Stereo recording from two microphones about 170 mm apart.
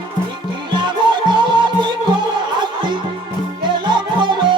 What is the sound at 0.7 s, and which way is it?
Music, 25° right (ahead or behind).